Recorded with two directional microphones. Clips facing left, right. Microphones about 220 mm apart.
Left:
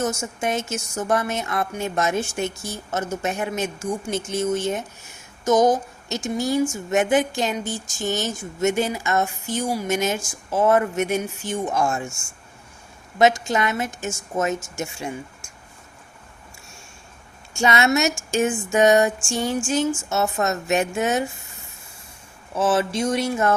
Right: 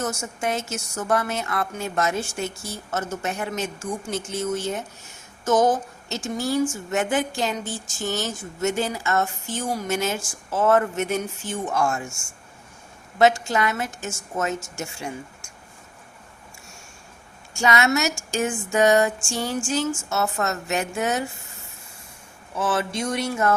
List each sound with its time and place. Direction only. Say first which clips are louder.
0.5 s speech: left 2 dB; 20° left (ahead or behind)
13.1 s speech: left 1 dB; 20° left (ahead or behind)
17.5 s a woman's voice: left 1 dB; 25° left (ahead or behind)
22.5 s speech: left 4 dB; 20° left (ahead or behind)